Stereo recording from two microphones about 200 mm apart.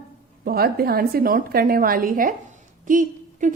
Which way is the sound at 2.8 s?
40° right (ahead or behind).